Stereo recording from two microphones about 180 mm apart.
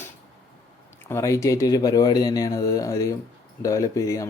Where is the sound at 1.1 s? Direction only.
15° left (ahead or behind).